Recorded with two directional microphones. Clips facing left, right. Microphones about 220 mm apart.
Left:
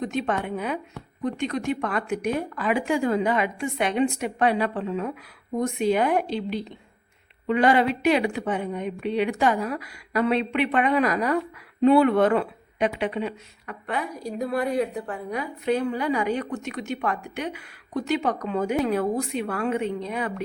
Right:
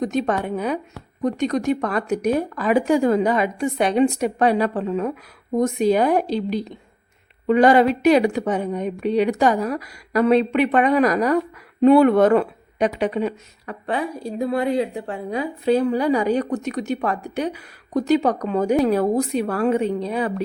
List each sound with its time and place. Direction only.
0.0 s speech: 40° right (ahead or behind)